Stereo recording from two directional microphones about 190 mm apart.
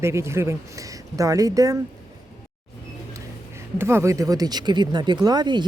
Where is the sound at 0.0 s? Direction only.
15° right (ahead or behind).